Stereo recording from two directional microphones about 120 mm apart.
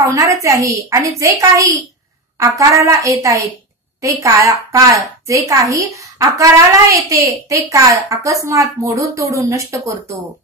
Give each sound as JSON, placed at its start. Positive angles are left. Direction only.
{"t": 0.0, "sound": "a woman's voice", "side_deg": -25}